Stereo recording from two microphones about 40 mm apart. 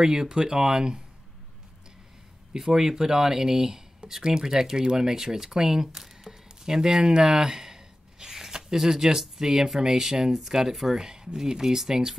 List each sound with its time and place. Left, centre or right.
0.0 s speech: centre
2.5 s speech: centre